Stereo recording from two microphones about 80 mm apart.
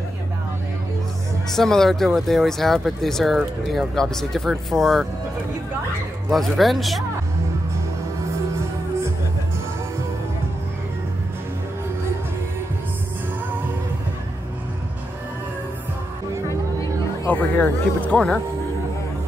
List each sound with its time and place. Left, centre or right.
1.5 s speech: centre
6.3 s speech: centre
16.4 s music: left
17.3 s speech: left